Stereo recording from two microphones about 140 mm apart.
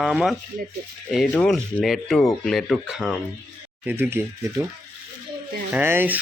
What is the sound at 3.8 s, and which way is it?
Speech, 15° right (ahead or behind).